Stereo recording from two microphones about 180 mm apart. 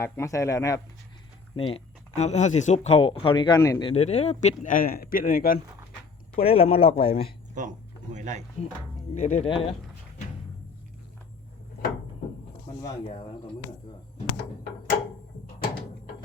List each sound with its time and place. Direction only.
0.0 s speech: 15° left (ahead or behind)
1.5 s speech: 30° left (ahead or behind); by 5.5 s 50° left (ahead or behind)
6.4 s speech: 35° left (ahead or behind)
7.6 s speech: 45° right (ahead or behind)
9.1 s speech: 40° left (ahead or behind)